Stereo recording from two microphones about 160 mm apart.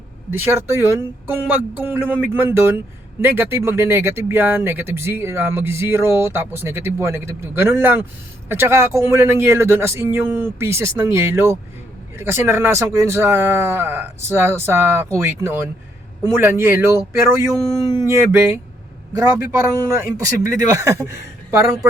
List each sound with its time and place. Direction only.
0.3 s a man's voice: 15° right (ahead or behind)